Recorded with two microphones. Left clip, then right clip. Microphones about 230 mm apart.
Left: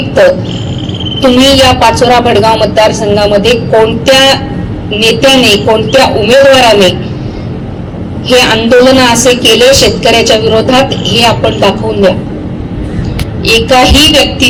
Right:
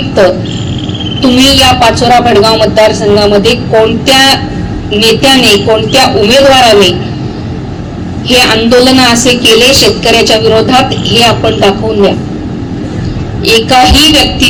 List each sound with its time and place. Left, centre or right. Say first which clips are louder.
1.4 s a woman's voice: right 1 dB; left
8.3 s a woman's voice: even; left
13.4 s a woman's voice: right 1 dB; left